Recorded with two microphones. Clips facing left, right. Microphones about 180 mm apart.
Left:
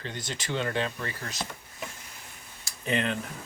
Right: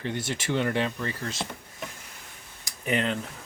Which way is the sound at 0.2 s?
20° left (ahead or behind).